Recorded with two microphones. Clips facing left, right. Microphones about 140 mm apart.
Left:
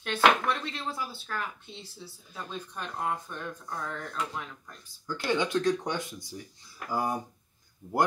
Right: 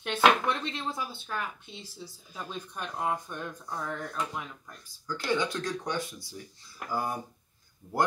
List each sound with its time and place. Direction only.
0.0 s speech: 25° right (ahead or behind)
2.3 s speech: 10° right (ahead or behind)
5.0 s speech: 20° left (ahead or behind)